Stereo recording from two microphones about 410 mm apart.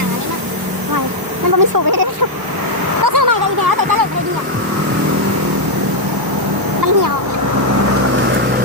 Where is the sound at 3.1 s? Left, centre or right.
Right.